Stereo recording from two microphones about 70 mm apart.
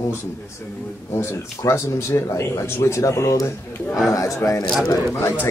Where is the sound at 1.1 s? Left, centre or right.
Left.